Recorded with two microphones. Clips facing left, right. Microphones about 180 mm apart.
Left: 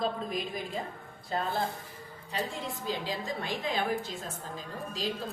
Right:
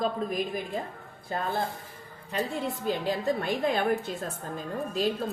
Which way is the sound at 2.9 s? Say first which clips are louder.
Right 7 dB; 55° right (ahead or behind).